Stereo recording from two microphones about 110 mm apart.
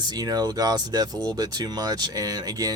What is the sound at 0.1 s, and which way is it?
Speech, 35° right (ahead or behind).